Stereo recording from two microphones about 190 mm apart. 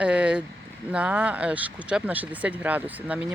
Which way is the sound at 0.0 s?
5° right (ahead or behind).